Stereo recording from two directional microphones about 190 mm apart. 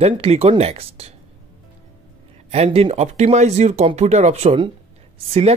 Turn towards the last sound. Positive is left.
turn(degrees=-30)  # may be behind; listen again after turning